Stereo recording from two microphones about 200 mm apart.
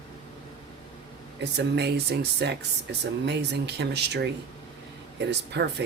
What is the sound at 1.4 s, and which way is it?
Speech, 55° right (ahead or behind).